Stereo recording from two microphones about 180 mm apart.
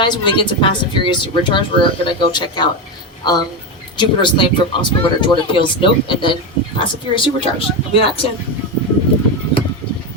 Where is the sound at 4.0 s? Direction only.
25° left (ahead or behind).